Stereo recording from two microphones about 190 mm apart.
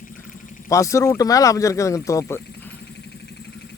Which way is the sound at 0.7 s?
15° left (ahead or behind).